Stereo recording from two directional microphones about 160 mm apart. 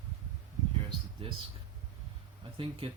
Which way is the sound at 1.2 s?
35° right (ahead or behind).